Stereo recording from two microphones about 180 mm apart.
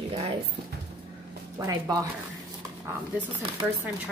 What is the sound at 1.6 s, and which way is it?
Speech, 20° right (ahead or behind).